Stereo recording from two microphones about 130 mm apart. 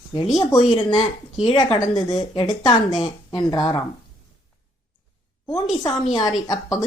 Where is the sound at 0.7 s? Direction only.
35° left (ahead or behind).